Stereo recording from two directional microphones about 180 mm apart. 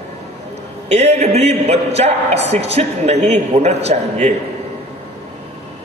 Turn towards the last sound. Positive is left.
turn(degrees=-40)  # may be behind; listen again after turning